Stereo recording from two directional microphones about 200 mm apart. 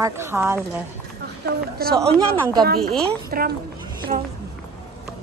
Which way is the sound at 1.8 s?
50° right (ahead or behind).